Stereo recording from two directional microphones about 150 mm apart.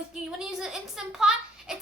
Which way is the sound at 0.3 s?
5° right (ahead or behind).